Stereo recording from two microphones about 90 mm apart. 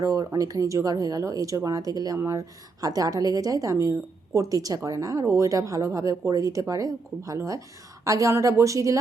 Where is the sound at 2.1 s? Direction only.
30° right (ahead or behind).